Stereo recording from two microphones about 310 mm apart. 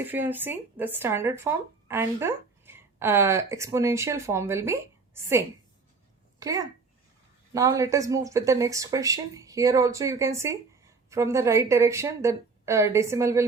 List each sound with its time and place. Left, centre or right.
0.0 s speech: centre
6.4 s speech: centre